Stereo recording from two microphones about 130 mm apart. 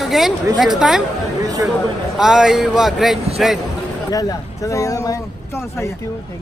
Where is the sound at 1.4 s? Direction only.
25° right (ahead or behind).